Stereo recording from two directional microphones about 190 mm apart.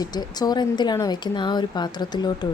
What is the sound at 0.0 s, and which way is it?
A woman's voice, 20° left (ahead or behind).